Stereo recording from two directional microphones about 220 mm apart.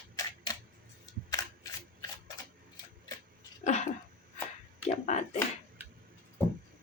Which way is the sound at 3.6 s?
30° left (ahead or behind).